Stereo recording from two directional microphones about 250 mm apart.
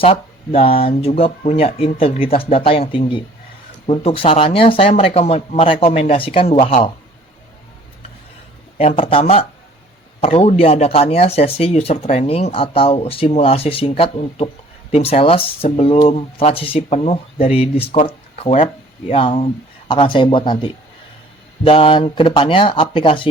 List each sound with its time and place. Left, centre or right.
0.0 s speech: left
8.8 s speech: left